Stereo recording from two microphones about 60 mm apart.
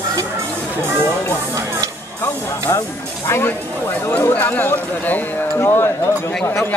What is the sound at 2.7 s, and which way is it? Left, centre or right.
Speech, left.